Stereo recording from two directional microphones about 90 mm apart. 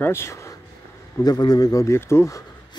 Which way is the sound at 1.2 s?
50° left (ahead or behind).